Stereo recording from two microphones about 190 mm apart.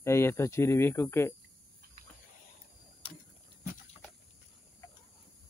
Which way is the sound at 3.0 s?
30° left (ahead or behind).